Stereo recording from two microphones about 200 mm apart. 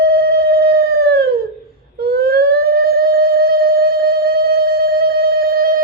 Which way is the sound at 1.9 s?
50° right (ahead or behind).